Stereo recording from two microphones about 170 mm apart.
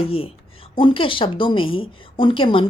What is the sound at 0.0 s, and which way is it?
A woman's voice, 35° left (ahead or behind).